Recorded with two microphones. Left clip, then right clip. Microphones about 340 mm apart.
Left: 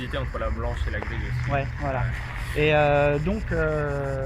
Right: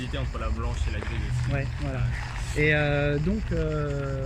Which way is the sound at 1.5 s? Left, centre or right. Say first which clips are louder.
Left 7 dB; left.